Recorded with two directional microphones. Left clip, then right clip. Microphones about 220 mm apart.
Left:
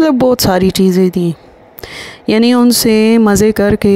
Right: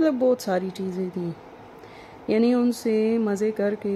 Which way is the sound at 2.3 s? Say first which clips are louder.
Left 11 dB; 50° left (ahead or behind).